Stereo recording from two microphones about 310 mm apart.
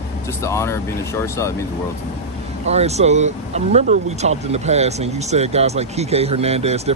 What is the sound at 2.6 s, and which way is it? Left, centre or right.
Speech, right.